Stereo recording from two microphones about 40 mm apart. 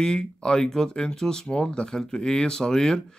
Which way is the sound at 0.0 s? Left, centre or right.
Left.